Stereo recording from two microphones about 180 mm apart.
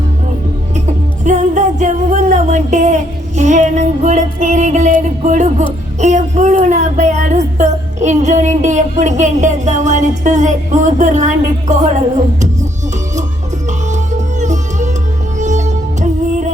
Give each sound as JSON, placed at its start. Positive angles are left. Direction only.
{"t": 1.2, "sound": "music", "side_deg": -40}
{"t": 13.7, "sound": "music", "side_deg": -40}